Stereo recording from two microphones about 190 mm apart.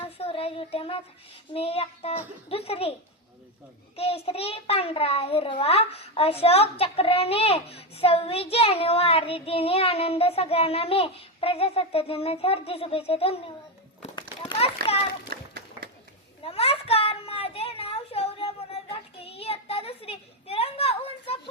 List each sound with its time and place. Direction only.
0.2 s child singing: 30° left (ahead or behind)
1.5 s a child's voice: 30° left (ahead or behind)
3.9 s a child's voice: 30° left (ahead or behind)
14.2 s a sound: 30° left (ahead or behind)
15.3 s run: 55° right (ahead or behind)
16.4 s a sound: 30° left (ahead or behind)